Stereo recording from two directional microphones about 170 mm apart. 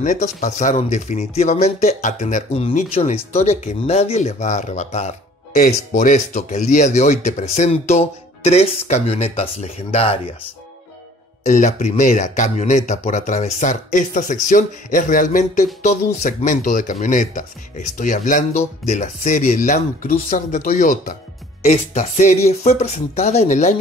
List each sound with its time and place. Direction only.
0.0 s speech: 45° left (ahead or behind)
11.4 s speech: 45° left (ahead or behind)